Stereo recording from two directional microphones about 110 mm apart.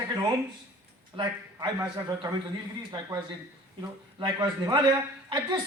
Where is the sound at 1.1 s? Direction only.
40° right (ahead or behind).